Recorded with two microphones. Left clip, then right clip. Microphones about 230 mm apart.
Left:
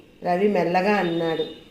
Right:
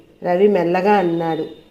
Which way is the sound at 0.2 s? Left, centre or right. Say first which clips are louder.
Right 6 dB; right.